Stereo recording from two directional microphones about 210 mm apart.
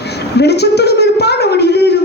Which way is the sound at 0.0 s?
50° left (ahead or behind).